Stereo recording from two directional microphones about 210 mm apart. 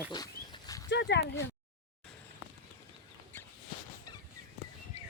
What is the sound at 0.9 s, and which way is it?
Speech, 55° left (ahead or behind).